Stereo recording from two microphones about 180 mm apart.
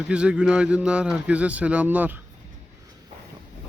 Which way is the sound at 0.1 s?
5° right (ahead or behind).